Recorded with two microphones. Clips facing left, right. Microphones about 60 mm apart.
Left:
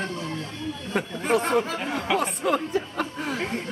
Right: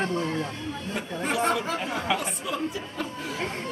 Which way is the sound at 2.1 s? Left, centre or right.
Left.